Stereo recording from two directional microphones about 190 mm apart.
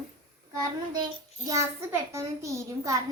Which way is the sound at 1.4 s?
15° right (ahead or behind).